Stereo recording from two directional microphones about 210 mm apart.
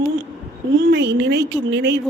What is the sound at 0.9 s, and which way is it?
A woman's voice, 55° right (ahead or behind).